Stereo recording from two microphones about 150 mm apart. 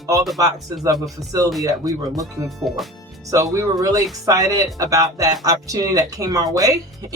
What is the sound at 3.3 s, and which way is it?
Speech, 20° right (ahead or behind).